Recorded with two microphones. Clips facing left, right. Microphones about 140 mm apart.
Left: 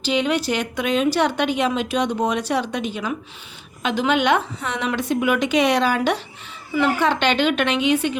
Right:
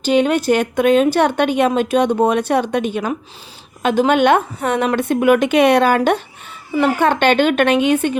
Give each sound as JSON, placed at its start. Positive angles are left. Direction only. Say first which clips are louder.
{"t": 0.0, "sound": "a woman's voice", "louder": "right 6 dB", "side_deg": -50}